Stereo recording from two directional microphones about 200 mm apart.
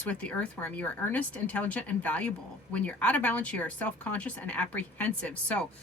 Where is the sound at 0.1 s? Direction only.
5° left (ahead or behind).